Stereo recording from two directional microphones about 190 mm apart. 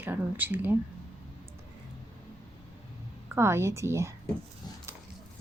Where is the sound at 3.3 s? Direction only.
15° right (ahead or behind).